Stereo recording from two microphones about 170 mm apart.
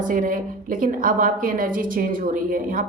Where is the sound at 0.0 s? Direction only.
50° right (ahead or behind).